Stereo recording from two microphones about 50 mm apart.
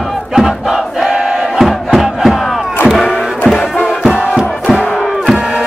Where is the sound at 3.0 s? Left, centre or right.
Centre.